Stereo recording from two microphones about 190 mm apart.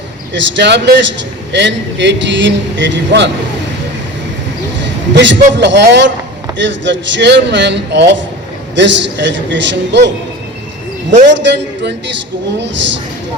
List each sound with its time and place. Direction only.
0.3 s a man's voice: 70° right (ahead or behind)
5.1 s a man's voice: 70° right (ahead or behind)
11.3 s a man's voice: 70° right (ahead or behind)